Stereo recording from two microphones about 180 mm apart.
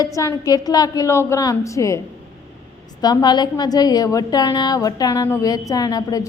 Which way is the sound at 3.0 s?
25° left (ahead or behind).